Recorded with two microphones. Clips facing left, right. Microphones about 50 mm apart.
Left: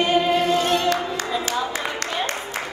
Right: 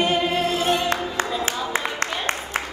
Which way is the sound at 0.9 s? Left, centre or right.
Right.